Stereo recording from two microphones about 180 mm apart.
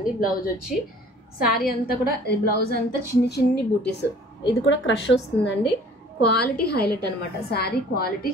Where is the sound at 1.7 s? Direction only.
60° left (ahead or behind).